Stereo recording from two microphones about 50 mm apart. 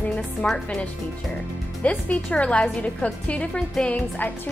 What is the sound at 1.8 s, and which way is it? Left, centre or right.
A woman's voice, left.